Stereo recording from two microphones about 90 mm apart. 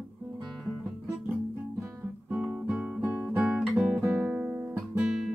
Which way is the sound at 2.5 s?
15° right (ahead or behind).